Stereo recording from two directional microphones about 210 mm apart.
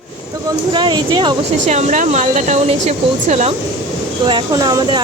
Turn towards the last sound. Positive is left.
turn(degrees=-20)  # may be behind; listen again after turning